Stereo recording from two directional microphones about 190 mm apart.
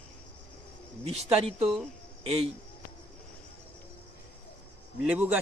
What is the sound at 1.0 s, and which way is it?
Speech, 30° right (ahead or behind).